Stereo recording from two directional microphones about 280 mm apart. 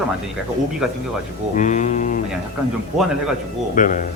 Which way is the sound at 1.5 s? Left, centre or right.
Left.